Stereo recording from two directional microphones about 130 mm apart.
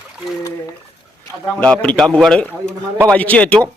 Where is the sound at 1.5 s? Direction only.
10° left (ahead or behind).